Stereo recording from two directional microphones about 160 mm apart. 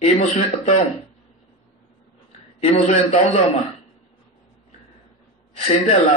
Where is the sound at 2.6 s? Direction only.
35° left (ahead or behind).